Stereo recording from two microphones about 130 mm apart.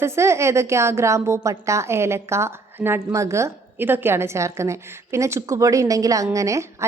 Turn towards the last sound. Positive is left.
turn(degrees=-25)  # may be behind; listen again after turning